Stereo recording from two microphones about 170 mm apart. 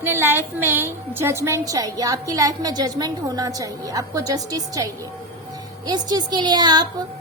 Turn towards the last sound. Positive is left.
turn(degrees=-25)  # may be behind; listen again after turning